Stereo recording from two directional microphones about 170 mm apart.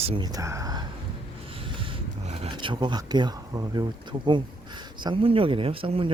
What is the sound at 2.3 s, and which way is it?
Speech, 35° right (ahead or behind).